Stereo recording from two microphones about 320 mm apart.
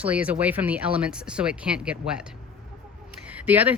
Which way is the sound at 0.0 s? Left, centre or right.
Centre.